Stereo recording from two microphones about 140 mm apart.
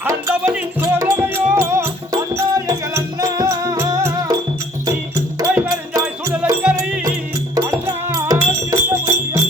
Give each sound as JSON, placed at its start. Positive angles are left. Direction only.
{"t": 0.1, "sound": "music", "side_deg": -20}
{"t": 6.6, "sound": "music", "side_deg": -5}
{"t": 7.5, "sound": "music", "side_deg": -25}